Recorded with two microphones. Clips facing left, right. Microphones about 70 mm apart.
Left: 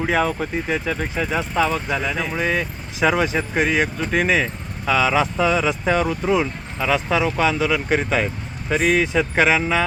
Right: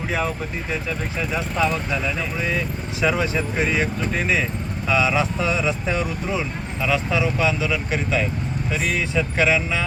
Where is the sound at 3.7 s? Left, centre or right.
Left.